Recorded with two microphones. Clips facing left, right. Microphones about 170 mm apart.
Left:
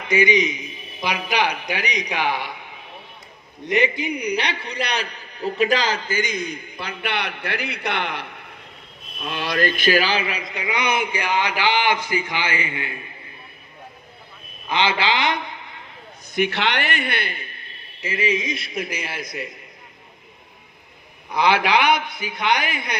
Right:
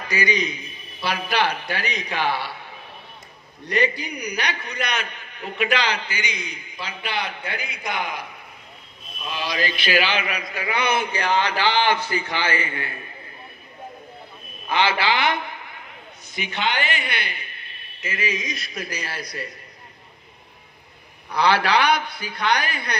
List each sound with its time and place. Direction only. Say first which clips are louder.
0.0 s a man's voice: left 5 dB; 20° left (ahead or behind)
14.7 s a man's voice: even; 20° left (ahead or behind)
16.3 s a man's voice: left 4 dB; 65° left (ahead or behind); by 17.5 s 50° left (ahead or behind)
18.0 s a man's voice: left 5 dB; 30° left (ahead or behind)
21.3 s a man's voice: left 1 dB; 20° left (ahead or behind)